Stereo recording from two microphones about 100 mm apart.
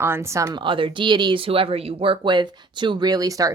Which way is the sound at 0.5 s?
55° right (ahead or behind).